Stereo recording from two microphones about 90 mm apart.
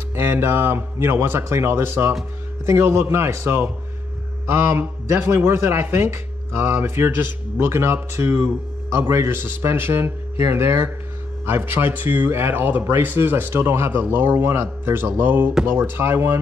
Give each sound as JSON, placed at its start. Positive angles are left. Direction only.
{"t": 0.1, "sound": "speech", "side_deg": -25}